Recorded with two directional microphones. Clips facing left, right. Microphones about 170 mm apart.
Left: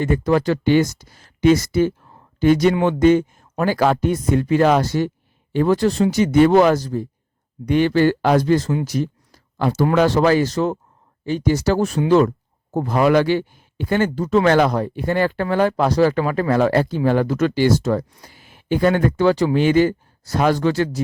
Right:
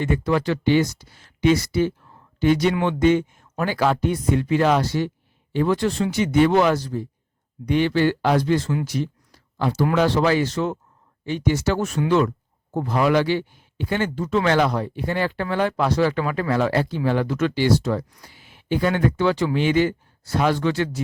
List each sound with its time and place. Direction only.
0.0 s speech: 40° left (ahead or behind)
8.9 s a sound: 45° left (ahead or behind)
9.9 s speech: 45° left (ahead or behind)